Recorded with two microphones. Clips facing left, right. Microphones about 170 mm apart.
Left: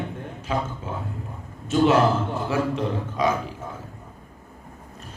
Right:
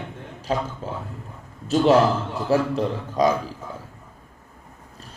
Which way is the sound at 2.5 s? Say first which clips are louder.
Right 6 dB; 35° right (ahead or behind).